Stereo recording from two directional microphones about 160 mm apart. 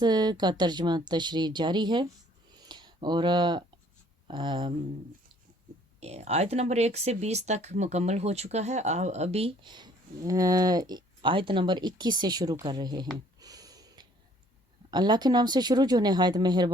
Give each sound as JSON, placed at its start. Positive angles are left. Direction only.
{"t": 0.0, "sound": "speech", "side_deg": -25}
{"t": 6.0, "sound": "speech", "side_deg": -40}
{"t": 13.1, "sound": "a sound", "side_deg": -25}
{"t": 14.8, "sound": "speech", "side_deg": -25}